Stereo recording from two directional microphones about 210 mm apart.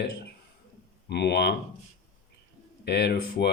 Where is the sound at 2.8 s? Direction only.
50° left (ahead or behind).